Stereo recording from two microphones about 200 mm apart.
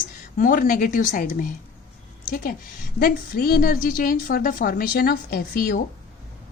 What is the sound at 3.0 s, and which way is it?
A woman's voice, 50° left (ahead or behind).